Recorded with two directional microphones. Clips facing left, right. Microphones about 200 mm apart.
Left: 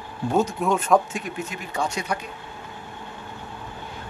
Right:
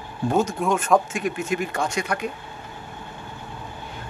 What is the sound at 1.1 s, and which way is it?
Speech, 90° right.